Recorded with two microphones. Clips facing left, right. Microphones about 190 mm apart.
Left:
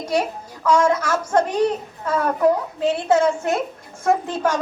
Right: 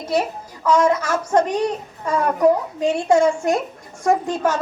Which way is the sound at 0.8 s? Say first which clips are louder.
Right 1 dB; 10° right (ahead or behind).